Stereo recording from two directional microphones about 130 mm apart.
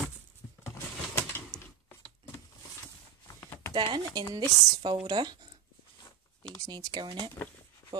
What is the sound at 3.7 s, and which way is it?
Speech, 40° right (ahead or behind).